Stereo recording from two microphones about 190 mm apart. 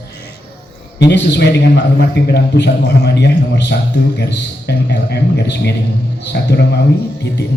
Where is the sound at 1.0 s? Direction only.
60° left (ahead or behind).